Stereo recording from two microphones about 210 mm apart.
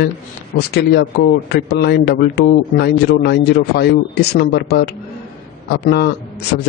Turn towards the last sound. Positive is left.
turn(degrees=50)  # may be behind; listen again after turning